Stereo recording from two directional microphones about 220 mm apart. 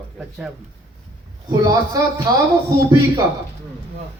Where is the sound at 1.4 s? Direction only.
15° right (ahead or behind).